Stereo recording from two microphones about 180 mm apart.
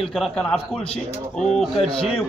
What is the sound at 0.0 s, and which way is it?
A man's voice, centre (ahead or behind).